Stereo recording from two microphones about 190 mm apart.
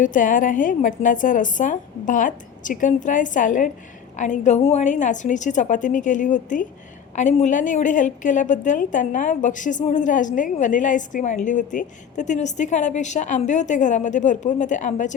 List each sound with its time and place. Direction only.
0.0 s a woman's voice: 45° left (ahead or behind)